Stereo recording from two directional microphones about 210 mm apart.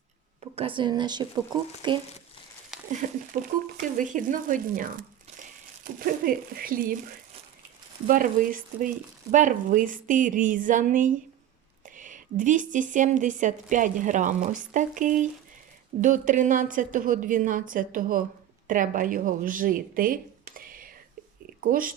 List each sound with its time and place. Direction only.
0.5 s speech: 25° right (ahead or behind)
3.0 s a woman's voice: 40° right (ahead or behind)
8.0 s a woman's voice: 40° right (ahead or behind)